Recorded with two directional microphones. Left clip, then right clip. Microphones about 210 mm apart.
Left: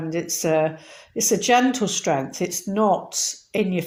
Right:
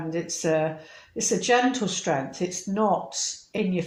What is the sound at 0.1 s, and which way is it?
Speech, 45° left (ahead or behind).